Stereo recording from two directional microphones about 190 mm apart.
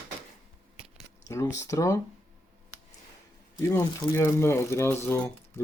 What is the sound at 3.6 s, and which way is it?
Speech, 15° left (ahead or behind).